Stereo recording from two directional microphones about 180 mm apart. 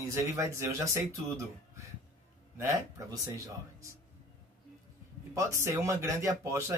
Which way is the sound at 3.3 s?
15° right (ahead or behind).